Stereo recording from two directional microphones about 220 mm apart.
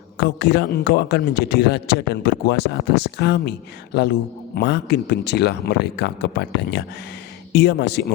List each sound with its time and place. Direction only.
0.2 s a man's voice: 50° left (ahead or behind)